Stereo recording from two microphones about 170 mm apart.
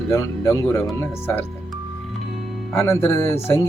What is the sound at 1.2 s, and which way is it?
Speech, 10° left (ahead or behind).